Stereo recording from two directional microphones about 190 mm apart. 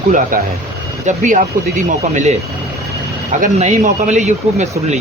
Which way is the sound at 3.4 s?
40° right (ahead or behind).